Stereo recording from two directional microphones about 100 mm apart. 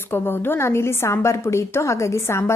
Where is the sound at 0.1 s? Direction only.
20° left (ahead or behind).